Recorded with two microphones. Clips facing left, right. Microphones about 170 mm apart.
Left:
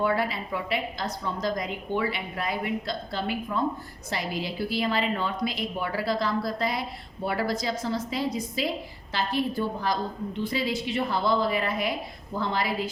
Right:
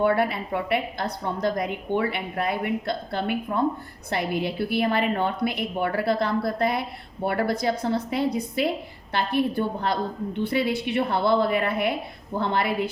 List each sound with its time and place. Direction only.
0.0 s a woman's voice: 55° right (ahead or behind)